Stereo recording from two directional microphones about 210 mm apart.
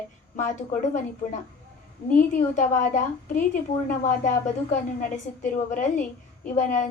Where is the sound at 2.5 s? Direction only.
35° left (ahead or behind).